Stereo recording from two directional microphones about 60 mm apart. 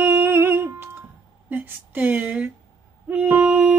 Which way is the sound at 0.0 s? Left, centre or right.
Right.